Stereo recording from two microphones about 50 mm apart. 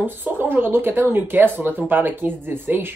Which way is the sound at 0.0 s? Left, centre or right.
Right.